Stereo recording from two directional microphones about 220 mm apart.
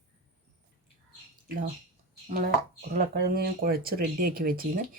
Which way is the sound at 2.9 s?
40° right (ahead or behind).